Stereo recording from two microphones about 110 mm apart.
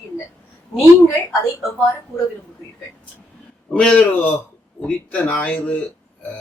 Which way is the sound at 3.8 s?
10° left (ahead or behind).